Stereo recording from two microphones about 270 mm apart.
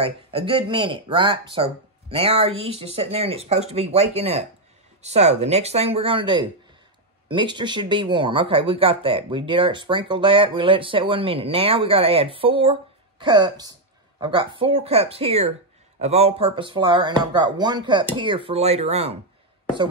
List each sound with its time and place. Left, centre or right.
0.0 s speech: centre